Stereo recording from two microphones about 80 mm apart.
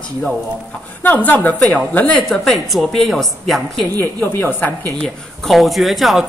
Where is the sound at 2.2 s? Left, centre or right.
Centre.